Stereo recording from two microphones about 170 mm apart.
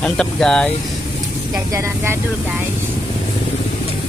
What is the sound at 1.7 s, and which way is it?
Speech, 15° right (ahead or behind).